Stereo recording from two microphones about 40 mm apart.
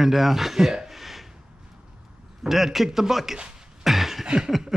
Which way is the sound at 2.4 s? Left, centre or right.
Centre.